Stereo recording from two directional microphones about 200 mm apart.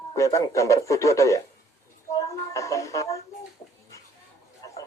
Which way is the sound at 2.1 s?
15° left (ahead or behind).